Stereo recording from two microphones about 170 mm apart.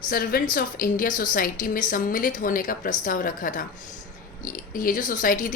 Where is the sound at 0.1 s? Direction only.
60° left (ahead or behind).